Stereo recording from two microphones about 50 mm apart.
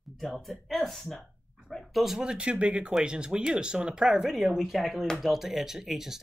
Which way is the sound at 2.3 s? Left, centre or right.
Right.